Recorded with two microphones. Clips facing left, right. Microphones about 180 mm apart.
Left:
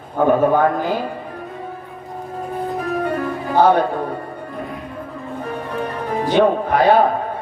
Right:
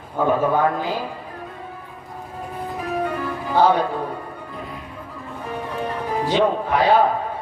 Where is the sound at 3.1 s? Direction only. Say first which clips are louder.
Left 4 dB; 50° left (ahead or behind).